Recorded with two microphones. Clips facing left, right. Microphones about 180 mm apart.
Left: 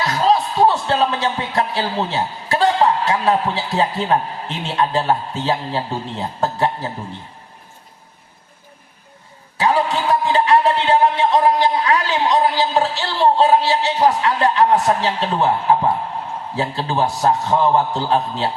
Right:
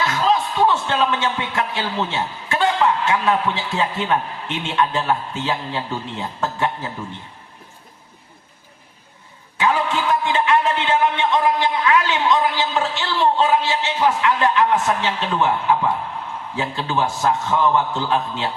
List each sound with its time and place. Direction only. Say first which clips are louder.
0.0 s speech: left 2 dB; 35° left (ahead or behind)
9.6 s a man's voice: left 2 dB; 35° left (ahead or behind)